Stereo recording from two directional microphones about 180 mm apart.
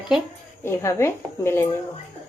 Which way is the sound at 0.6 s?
15° left (ahead or behind).